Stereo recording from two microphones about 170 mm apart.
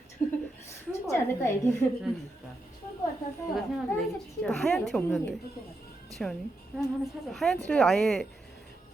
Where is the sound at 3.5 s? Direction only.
Centre (ahead or behind).